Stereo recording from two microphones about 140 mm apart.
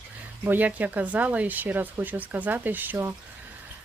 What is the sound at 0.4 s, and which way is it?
Speech, 10° right (ahead or behind).